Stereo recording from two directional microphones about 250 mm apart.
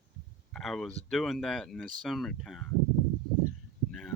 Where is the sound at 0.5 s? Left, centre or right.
Centre.